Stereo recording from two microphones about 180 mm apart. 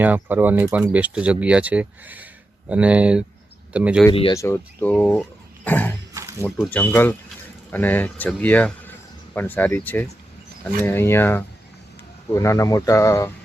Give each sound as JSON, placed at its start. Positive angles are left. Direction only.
{"t": 0.0, "sound": "speech", "side_deg": -10}
{"t": 4.1, "sound": "speech", "side_deg": 30}
{"t": 4.4, "sound": "speech", "side_deg": 15}